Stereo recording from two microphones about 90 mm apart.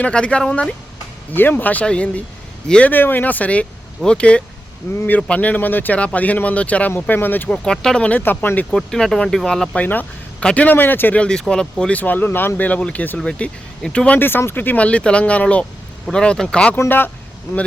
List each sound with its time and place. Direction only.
0.0 s speech: 15° left (ahead or behind)
1.3 s speech: 20° left (ahead or behind)
2.9 s speech: 20° left (ahead or behind)
8.2 s speech: 25° left (ahead or behind)
8.7 s speech: 5° left (ahead or behind)
9.7 s speech: 20° left (ahead or behind)
14.2 s speech: 25° left (ahead or behind)
16.7 s speech: 25° left (ahead or behind)